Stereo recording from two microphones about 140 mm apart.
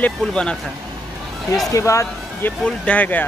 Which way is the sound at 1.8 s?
20° left (ahead or behind).